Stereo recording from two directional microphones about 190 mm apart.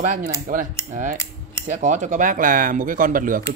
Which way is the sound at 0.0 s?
45° right (ahead or behind).